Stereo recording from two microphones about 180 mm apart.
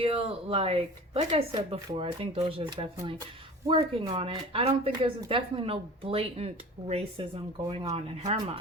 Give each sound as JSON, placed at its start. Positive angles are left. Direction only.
{"t": 0.0, "sound": "speech", "side_deg": -30}